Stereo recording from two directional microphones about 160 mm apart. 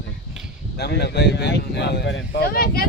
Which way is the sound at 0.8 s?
90° left.